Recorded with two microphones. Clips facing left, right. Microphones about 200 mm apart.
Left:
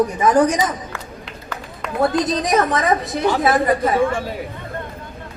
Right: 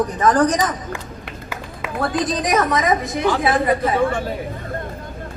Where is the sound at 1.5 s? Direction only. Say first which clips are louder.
Left 2 dB; 5° right (ahead or behind).